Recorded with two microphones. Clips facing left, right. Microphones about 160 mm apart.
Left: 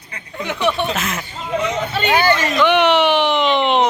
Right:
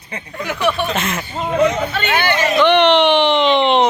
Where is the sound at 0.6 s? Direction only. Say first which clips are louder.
Right 1 dB; 25° left (ahead or behind).